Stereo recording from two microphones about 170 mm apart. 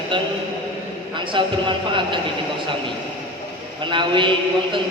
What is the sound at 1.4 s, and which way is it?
Speech, 30° right (ahead or behind).